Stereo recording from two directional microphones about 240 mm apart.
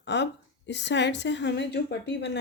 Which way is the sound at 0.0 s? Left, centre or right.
Left.